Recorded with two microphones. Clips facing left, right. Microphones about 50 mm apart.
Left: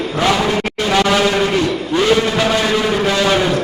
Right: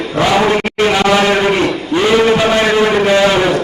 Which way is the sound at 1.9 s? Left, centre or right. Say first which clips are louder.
Right 4 dB; right.